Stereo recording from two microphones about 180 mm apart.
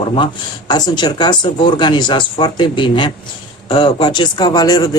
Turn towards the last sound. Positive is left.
turn(degrees=20)  # may be behind; listen again after turning